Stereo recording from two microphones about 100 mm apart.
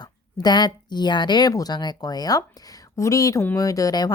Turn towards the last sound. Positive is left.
turn(degrees=40)  # may be behind; listen again after turning